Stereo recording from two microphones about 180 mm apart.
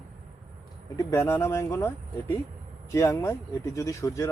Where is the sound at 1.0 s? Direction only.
15° left (ahead or behind).